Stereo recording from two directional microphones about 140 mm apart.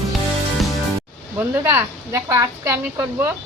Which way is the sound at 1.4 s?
15° right (ahead or behind).